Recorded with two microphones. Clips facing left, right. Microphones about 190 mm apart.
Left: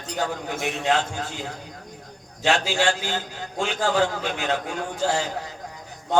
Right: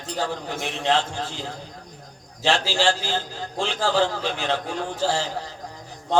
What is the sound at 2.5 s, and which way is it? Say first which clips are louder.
A man's voice: even; 30° right (ahead or behind).